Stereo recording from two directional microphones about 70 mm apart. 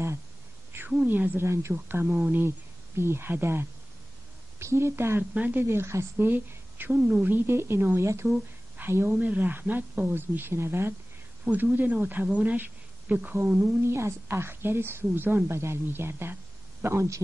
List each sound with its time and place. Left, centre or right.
1.0 s speech: right
1.4 s a woman's voice: right
1.7 s a woman's voice: right
5.3 s speech: right
5.6 s a woman's voice: right
13.6 s a woman's voice: right